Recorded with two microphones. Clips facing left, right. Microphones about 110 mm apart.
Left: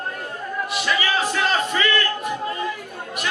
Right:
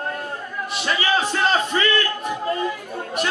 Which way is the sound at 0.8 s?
30° right (ahead or behind).